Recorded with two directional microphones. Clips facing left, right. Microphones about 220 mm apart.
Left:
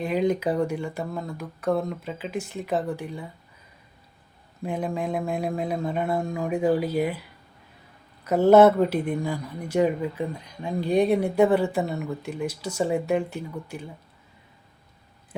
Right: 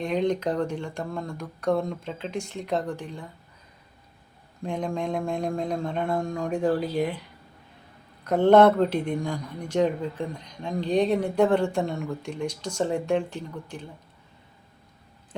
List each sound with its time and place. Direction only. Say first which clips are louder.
0.0 s speech: left 1 dB; 5° left (ahead or behind)
4.6 s speech: left 1 dB; 5° left (ahead or behind)